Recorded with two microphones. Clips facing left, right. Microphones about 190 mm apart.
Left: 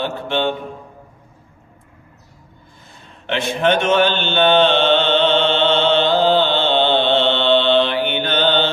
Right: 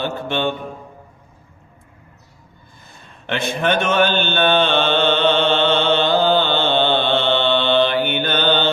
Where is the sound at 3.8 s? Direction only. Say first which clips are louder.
Left 1 dB; 55° right (ahead or behind).